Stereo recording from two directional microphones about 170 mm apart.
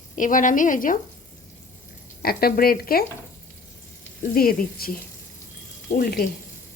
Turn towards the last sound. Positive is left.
turn(degrees=60)  # may be behind; listen again after turning